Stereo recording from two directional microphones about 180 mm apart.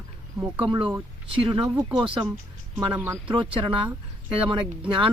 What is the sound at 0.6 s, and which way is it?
Speech, 25° right (ahead or behind).